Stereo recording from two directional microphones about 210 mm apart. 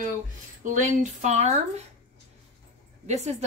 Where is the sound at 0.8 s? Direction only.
35° right (ahead or behind).